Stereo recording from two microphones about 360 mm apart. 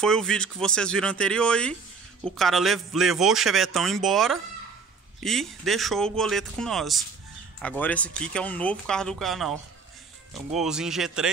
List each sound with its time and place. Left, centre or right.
0.0 s a man's voice: centre